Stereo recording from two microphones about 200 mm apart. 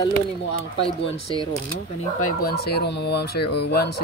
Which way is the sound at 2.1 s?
45° left (ahead or behind).